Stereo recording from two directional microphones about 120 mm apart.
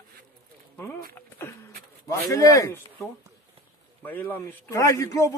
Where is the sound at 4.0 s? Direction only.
15° left (ahead or behind).